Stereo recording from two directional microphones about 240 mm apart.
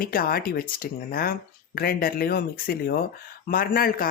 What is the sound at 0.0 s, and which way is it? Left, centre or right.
A man's voice, left.